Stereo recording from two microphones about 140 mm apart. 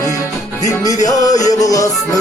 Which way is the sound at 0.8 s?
25° left (ahead or behind).